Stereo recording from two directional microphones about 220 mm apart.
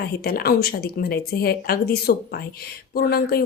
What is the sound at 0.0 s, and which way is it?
A woman's voice, 45° left (ahead or behind).